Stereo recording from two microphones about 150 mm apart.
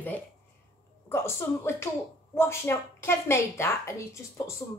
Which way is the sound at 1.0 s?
15° left (ahead or behind).